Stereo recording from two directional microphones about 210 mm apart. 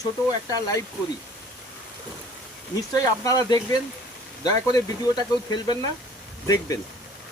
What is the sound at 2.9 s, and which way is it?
Speech, 15° left (ahead or behind).